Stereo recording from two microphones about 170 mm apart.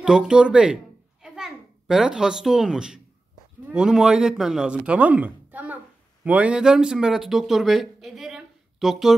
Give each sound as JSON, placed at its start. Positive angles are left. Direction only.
{"t": 0.0, "sound": "a child's voice", "side_deg": -5}